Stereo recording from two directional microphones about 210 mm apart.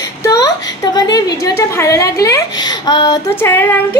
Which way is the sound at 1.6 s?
15° left (ahead or behind).